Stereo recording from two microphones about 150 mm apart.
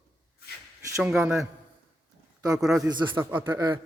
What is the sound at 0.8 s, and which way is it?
Speech, 20° right (ahead or behind).